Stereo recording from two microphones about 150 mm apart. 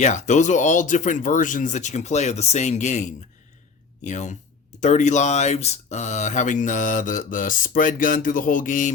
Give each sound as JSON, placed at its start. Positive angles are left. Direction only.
{"t": 0.0, "sound": "speech", "side_deg": 55}